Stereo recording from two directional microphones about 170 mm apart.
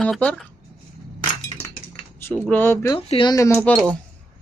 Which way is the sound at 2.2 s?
10° left (ahead or behind).